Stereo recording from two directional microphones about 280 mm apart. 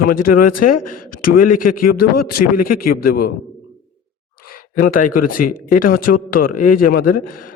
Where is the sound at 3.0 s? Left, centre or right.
Left.